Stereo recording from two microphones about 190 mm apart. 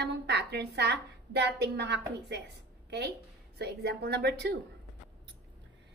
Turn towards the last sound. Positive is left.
turn(degrees=-60)  # may be behind; listen again after turning